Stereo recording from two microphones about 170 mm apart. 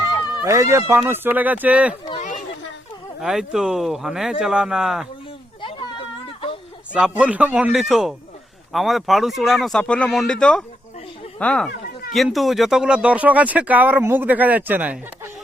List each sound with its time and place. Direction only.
0.0 s a sound: 25° left (ahead or behind)
0.4 s speech: 15° right (ahead or behind)
2.1 s chatter: 45° left (ahead or behind)
3.2 s speech: 5° right (ahead or behind)
6.9 s speech: 5° right (ahead or behind)